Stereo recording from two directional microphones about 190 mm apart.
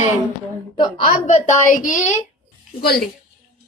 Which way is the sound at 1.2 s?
40° left (ahead or behind).